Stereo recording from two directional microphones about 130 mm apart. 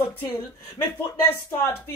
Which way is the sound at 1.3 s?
20° left (ahead or behind).